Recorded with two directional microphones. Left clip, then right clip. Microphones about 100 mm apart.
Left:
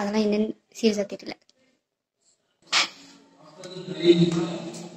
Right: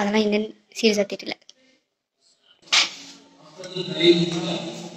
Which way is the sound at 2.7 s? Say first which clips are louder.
Right 4 dB; 20° left (ahead or behind).